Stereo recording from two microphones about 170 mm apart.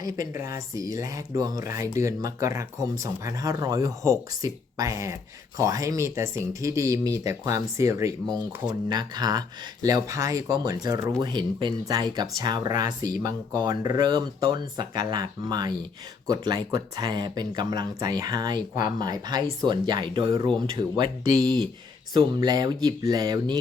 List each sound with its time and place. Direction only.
0.0 s speech: 20° right (ahead or behind)